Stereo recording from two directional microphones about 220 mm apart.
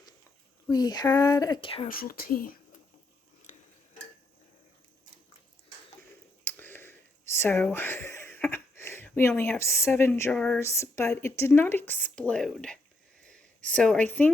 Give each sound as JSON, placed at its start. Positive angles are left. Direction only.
{"t": 0.7, "sound": "speech", "side_deg": 20}
{"t": 1.9, "sound": "speech", "side_deg": 40}
{"t": 3.5, "sound": "tick-tock", "side_deg": 35}
{"t": 6.4, "sound": "speech", "side_deg": 10}
{"t": 13.2, "sound": "a sound", "side_deg": 5}